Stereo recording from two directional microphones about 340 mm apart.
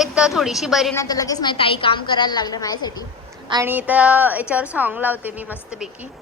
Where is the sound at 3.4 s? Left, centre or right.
Centre.